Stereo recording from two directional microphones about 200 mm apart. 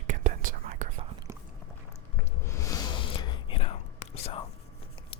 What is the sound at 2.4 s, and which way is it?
Whispering, 15° left (ahead or behind).